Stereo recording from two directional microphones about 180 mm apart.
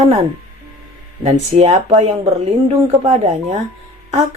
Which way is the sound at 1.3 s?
40° right (ahead or behind).